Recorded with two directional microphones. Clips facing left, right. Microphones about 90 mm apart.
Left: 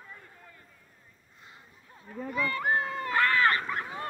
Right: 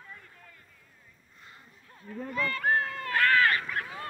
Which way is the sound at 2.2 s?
15° left (ahead or behind).